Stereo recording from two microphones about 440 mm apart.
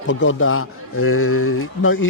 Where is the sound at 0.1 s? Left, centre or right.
Left.